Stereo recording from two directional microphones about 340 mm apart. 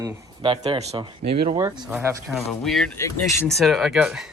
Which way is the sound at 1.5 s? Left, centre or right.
Centre.